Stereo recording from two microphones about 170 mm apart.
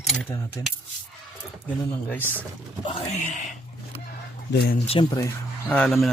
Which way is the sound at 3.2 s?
50° left (ahead or behind).